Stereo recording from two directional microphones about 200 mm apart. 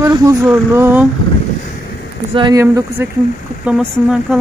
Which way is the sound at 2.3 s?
20° right (ahead or behind).